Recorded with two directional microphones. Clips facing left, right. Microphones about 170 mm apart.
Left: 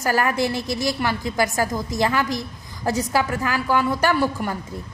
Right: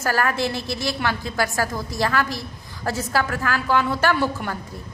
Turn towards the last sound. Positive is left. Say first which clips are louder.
# left 1 dB
turn(degrees=10)  # may be behind; listen again after turning